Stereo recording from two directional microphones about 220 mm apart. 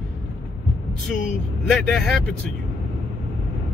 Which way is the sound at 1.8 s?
Centre (ahead or behind).